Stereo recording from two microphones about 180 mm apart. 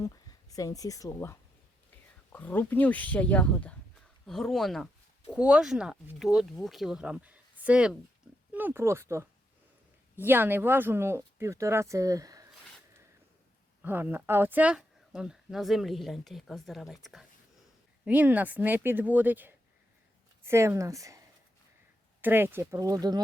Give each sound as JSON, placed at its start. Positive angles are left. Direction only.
{"t": 0.0, "sound": "speech", "side_deg": 20}
{"t": 13.8, "sound": "a woman's voice", "side_deg": -10}